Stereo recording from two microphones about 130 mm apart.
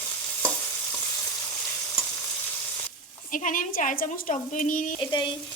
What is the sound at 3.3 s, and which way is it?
A woman's voice, 90° left.